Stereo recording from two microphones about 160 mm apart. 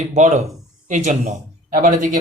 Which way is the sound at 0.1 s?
45° right (ahead or behind).